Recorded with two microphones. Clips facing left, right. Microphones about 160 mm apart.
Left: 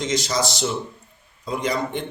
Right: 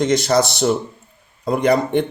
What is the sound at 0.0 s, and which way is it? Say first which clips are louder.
Speech: right 7 dB; 60° right (ahead or behind).